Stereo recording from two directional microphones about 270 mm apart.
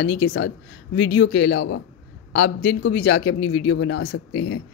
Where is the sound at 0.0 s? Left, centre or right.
Left.